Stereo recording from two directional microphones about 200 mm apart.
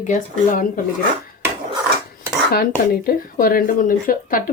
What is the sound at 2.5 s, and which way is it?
Speech, 45° left (ahead or behind).